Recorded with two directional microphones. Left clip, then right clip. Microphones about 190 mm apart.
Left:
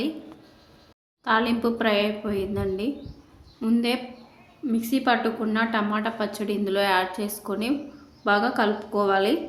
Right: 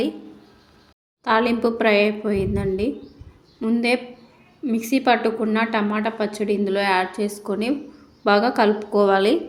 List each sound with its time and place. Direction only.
1.2 s a woman's voice: 20° right (ahead or behind)